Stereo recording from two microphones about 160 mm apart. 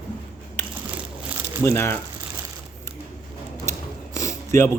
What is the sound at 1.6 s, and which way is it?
Speech, 15° left (ahead or behind).